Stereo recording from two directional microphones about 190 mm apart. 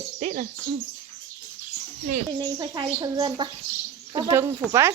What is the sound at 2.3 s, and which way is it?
Speech, 25° right (ahead or behind).